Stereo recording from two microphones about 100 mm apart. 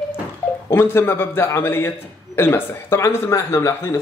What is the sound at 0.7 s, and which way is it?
Speech, 25° left (ahead or behind).